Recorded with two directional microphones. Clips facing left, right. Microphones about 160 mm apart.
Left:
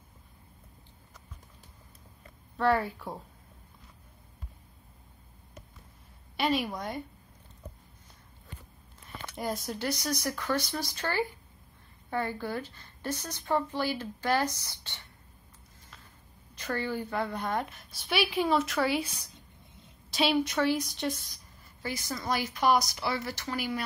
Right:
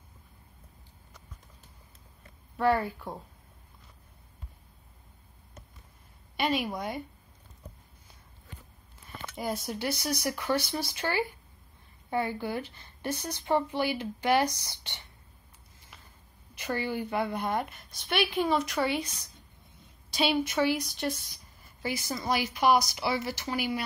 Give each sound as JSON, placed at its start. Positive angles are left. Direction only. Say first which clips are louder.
{"t": 2.5, "sound": "a woman's voice", "louder": "even", "side_deg": 0}
{"t": 6.3, "sound": "a woman's voice", "louder": "even", "side_deg": 0}
{"t": 9.3, "sound": "a woman's voice", "louder": "right 1 dB", "side_deg": -5}
{"t": 16.5, "sound": "a woman's voice", "louder": "right 1 dB", "side_deg": -15}